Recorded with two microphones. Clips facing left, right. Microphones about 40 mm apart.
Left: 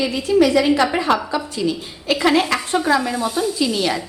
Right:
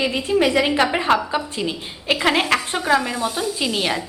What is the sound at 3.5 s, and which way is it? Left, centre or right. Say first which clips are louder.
Speech: left 2 dB; right.